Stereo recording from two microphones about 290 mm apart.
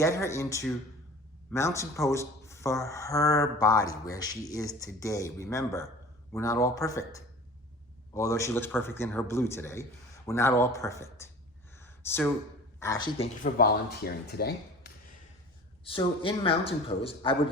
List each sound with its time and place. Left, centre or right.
0.0 s speech: centre
11.8 s a sound: centre
12.8 s speech: centre
13.4 s speech: left
15.8 s a man's voice: centre